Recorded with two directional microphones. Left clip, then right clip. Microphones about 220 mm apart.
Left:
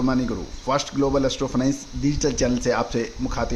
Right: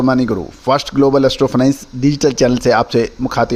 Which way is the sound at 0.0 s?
40° right (ahead or behind).